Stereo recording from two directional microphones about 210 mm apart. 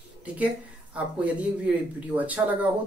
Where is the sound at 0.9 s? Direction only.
5° right (ahead or behind).